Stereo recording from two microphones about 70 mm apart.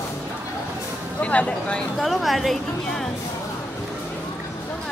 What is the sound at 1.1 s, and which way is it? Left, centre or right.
Speech, centre.